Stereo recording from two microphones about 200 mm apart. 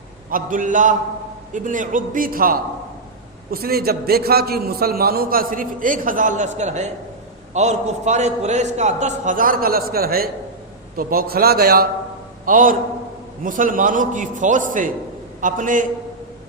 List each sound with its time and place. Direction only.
0.3 s a man's voice: 45° right (ahead or behind)